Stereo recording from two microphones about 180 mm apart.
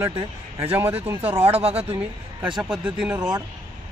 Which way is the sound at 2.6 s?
5° right (ahead or behind).